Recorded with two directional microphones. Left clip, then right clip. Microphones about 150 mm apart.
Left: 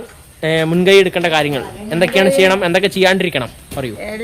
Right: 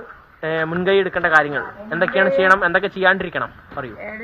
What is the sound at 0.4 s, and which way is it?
Speech, 35° left (ahead or behind).